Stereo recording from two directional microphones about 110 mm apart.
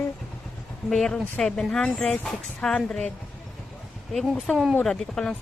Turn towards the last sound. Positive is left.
turn(degrees=5)  # may be behind; listen again after turning